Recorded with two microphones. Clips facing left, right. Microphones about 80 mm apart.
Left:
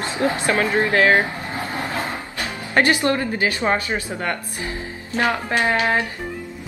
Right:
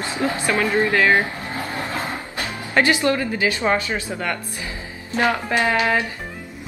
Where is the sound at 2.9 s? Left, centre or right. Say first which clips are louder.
Even; left.